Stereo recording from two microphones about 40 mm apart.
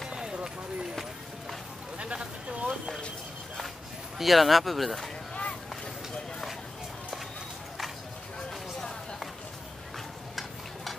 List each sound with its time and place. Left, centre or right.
0.1 s run: right
2.0 s a sound: right
4.2 s speech: centre
10.3 s stir: centre